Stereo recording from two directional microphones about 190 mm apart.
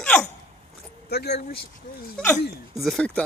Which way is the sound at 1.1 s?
60° left (ahead or behind).